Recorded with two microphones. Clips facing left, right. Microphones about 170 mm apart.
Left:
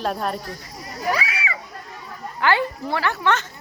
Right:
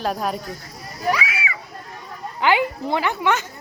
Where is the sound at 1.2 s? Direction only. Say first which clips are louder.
Even; 35° left (ahead or behind).